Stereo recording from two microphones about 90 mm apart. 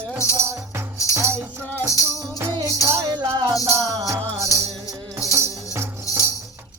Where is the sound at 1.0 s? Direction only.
35° left (ahead or behind).